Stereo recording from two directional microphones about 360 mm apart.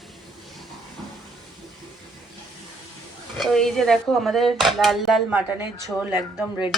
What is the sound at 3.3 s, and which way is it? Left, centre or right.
Speech, centre.